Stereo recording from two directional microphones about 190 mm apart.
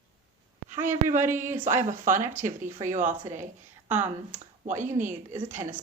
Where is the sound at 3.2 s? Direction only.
15° right (ahead or behind).